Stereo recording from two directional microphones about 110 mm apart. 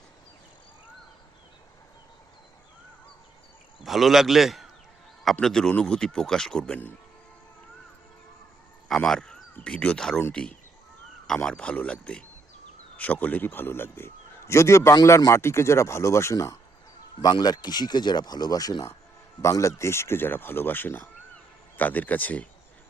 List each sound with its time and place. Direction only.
3.8 s a man's voice: centre (ahead or behind)
9.0 s a man's voice: 5° left (ahead or behind); by 16.6 s 30° left (ahead or behind)
17.2 s a man's voice: 40° left (ahead or behind); by 22.4 s 15° left (ahead or behind)